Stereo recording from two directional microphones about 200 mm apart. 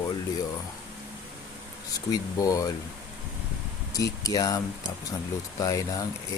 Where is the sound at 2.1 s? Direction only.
15° left (ahead or behind).